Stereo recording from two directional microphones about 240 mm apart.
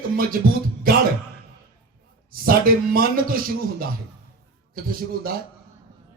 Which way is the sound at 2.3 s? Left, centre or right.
Right.